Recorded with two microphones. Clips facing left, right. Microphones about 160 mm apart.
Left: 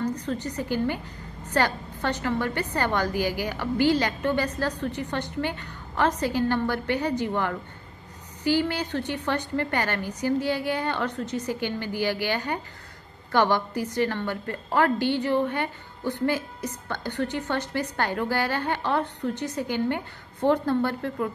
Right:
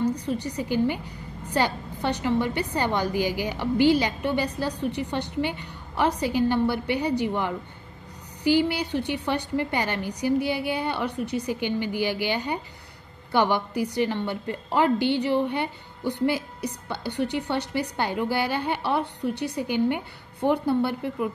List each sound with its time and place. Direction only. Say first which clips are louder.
0.0 s a woman's voice: right 2 dB; 10° right (ahead or behind)